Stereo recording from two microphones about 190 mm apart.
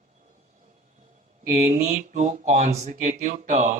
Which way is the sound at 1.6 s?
40° right (ahead or behind).